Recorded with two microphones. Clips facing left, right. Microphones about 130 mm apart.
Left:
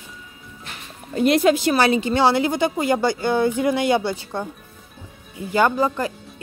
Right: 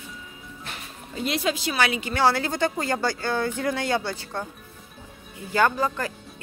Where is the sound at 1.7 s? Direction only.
35° left (ahead or behind); by 4.5 s 15° left (ahead or behind).